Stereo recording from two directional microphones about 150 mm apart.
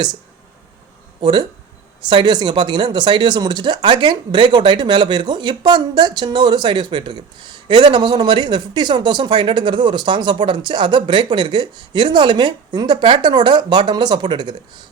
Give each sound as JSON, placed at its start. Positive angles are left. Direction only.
{"t": 1.2, "sound": "speech", "side_deg": -30}